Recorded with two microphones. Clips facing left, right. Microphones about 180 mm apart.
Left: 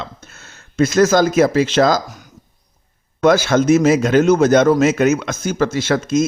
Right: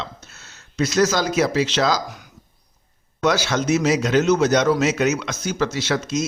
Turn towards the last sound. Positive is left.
turn(degrees=50)  # may be behind; listen again after turning